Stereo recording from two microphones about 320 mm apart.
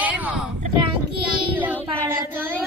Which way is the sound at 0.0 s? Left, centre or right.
Centre.